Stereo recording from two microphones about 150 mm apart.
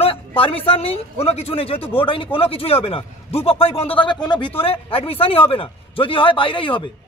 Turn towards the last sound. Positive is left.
turn(degrees=35)  # may be behind; listen again after turning